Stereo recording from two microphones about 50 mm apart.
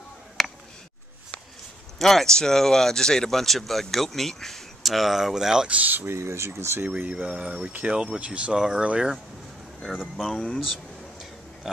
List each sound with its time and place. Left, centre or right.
0.4 s a sound: centre
2.0 s speech: centre
5.7 s speech: right
6.0 s speech: right
6.9 s speech: right
9.8 s speech: centre
10.6 s a sound: centre